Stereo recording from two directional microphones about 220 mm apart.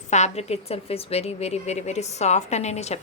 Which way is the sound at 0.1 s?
30° left (ahead or behind).